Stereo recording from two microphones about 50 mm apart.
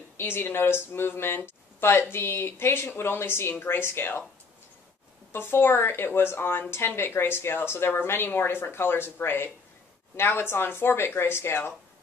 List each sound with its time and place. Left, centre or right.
0.2 s speech: left
5.3 s speech: left